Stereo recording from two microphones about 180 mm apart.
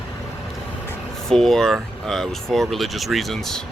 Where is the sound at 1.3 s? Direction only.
Centre (ahead or behind).